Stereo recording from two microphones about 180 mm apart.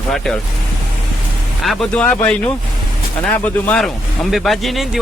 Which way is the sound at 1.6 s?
5° left (ahead or behind).